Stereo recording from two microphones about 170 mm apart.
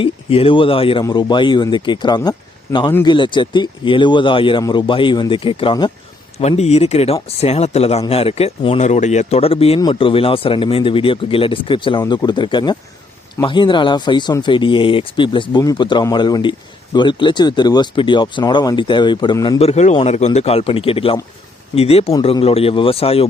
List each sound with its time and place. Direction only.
0.0 s speech: 35° left (ahead or behind)